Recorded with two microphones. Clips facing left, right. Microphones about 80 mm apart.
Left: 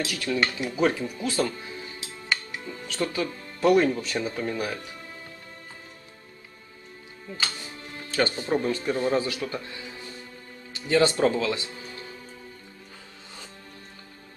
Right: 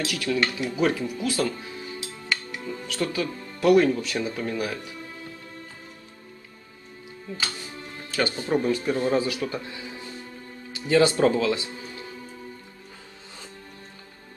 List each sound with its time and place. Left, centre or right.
0.0 s speech: centre
2.2 s music: centre
2.9 s speech: centre
8.1 s speech: centre
9.2 s speech: centre
10.9 s speech: centre